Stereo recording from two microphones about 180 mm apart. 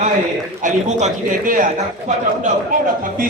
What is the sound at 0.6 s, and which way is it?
A man's voice, 45° right (ahead or behind).